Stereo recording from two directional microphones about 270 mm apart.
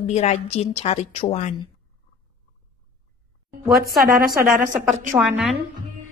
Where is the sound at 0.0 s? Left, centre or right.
Left.